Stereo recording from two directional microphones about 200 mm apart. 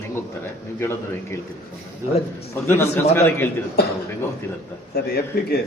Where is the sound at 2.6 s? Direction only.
10° left (ahead or behind).